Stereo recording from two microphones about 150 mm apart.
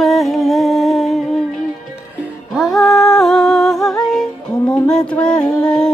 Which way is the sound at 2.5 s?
Centre (ahead or behind).